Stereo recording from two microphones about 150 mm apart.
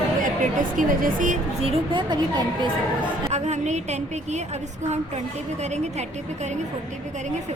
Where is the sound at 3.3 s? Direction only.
50° right (ahead or behind).